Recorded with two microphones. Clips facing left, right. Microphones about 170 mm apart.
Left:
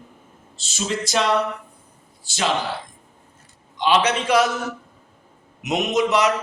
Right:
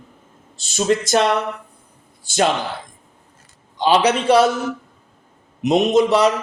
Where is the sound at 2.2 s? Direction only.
50° right (ahead or behind).